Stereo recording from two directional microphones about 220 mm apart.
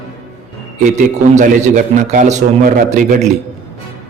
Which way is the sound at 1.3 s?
35° right (ahead or behind).